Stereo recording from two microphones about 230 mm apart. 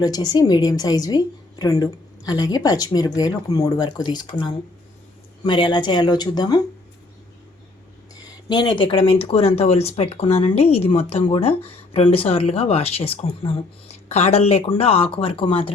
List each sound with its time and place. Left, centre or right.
0.0 s a woman's voice: centre
8.4 s speech: centre